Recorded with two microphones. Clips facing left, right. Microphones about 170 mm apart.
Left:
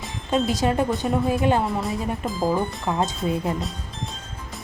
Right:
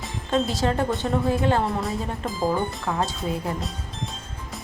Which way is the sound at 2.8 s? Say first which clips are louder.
Left 2 dB; 20° left (ahead or behind).